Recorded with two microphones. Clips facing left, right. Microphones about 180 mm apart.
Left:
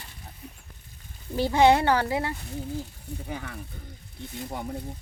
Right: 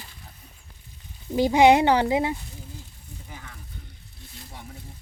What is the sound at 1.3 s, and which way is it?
Speech, 15° right (ahead or behind).